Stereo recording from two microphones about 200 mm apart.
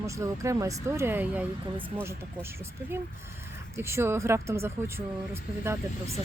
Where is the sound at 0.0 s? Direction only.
15° right (ahead or behind).